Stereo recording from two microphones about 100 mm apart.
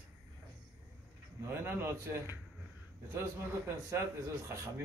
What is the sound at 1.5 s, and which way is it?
A man's voice, 25° right (ahead or behind).